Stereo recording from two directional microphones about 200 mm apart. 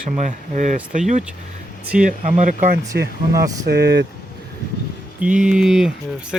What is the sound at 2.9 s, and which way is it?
Speech, 50° right (ahead or behind).